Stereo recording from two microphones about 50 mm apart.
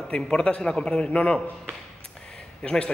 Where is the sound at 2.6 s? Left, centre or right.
Centre.